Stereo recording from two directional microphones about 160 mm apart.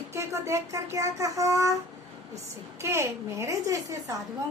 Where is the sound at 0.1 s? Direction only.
15° right (ahead or behind).